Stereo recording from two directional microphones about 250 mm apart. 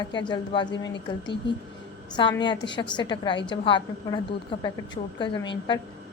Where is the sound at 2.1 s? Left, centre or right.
Centre.